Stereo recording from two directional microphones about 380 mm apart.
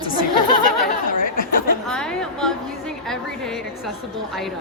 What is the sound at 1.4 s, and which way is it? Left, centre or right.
Speech, left.